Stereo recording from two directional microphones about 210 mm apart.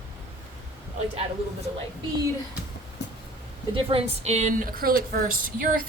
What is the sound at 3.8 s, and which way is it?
Speech, 30° right (ahead or behind).